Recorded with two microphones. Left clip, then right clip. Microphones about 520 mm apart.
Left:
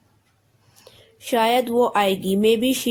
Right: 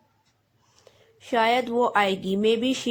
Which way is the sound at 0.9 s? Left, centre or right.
Left.